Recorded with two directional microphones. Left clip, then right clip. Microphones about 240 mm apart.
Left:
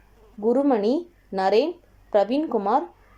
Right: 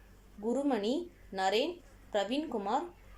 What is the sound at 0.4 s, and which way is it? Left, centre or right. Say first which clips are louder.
Speech: left 12 dB; centre.